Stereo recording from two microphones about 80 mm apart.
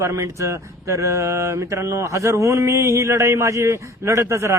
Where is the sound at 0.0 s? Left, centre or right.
Right.